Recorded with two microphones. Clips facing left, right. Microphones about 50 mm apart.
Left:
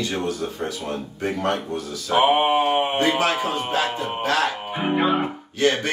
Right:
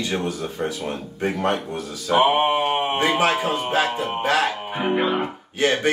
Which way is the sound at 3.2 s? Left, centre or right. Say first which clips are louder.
Right 2 dB; right.